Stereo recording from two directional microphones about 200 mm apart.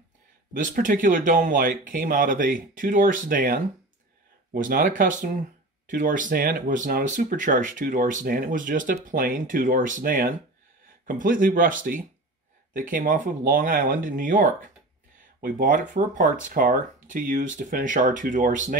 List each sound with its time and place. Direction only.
0.5 s speech: 45° right (ahead or behind)